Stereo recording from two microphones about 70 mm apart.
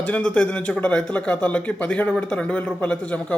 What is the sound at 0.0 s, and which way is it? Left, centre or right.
Speech, centre.